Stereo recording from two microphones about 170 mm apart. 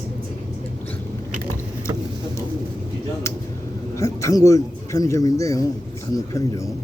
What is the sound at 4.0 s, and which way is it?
Speech, 15° left (ahead or behind).